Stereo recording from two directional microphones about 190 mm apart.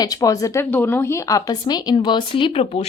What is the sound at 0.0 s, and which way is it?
Speech, 20° left (ahead or behind).